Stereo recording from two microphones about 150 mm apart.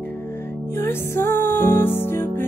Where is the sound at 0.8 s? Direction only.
15° left (ahead or behind).